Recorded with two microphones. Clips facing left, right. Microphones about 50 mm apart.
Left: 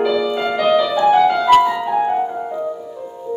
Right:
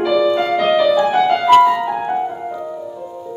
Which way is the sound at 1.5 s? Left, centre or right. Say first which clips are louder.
Right 2 dB; centre.